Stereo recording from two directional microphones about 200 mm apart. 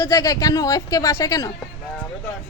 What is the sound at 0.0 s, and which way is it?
Speech, 15° left (ahead or behind).